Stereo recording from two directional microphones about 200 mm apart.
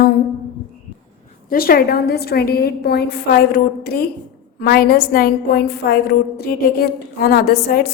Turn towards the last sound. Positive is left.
turn(degrees=50)  # may be behind; listen again after turning